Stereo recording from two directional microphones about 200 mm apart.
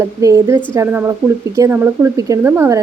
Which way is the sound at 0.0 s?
15° right (ahead or behind).